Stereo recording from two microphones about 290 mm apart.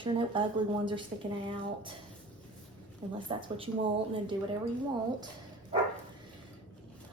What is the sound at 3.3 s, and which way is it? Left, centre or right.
Speech, centre.